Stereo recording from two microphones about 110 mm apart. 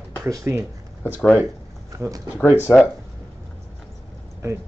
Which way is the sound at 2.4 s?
25° left (ahead or behind).